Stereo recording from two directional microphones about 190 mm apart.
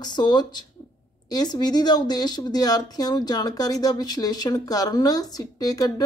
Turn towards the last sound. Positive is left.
turn(degrees=20)  # may be behind; listen again after turning